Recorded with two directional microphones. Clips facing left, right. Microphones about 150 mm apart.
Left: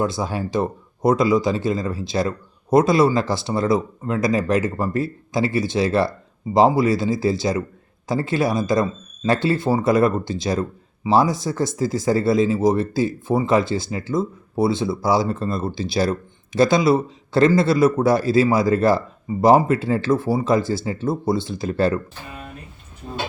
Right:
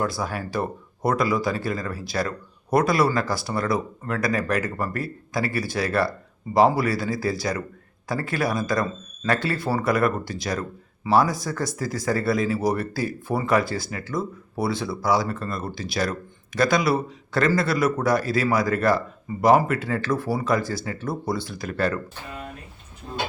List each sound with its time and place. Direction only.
0.0 s speech: 25° left (ahead or behind)